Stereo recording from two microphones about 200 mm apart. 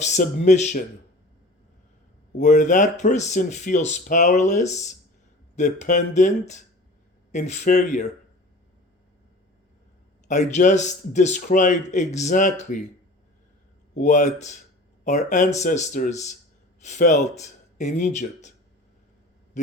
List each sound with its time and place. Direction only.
0.0 s speech: 35° left (ahead or behind)
2.4 s speech: 40° left (ahead or behind)
10.2 s speech: 35° left (ahead or behind)
13.9 s speech: 40° left (ahead or behind)